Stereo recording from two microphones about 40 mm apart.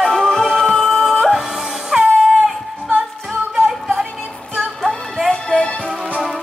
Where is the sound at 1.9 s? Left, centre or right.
Centre.